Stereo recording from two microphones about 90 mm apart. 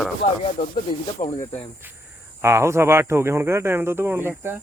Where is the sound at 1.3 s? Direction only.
30° left (ahead or behind).